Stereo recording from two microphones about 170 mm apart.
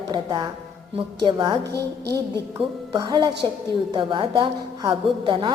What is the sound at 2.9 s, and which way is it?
A woman's voice, 25° right (ahead or behind).